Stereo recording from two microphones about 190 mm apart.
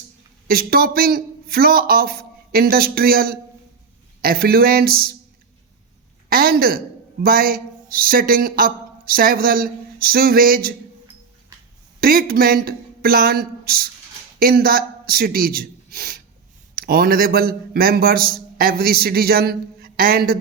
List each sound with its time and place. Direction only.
0.4 s a man's voice: 50° right (ahead or behind)
6.3 s a woman's voice: 50° right (ahead or behind)
11.9 s a man's voice: 50° right (ahead or behind)